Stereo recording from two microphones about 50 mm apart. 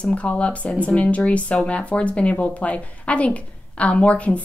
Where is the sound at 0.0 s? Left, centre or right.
Left.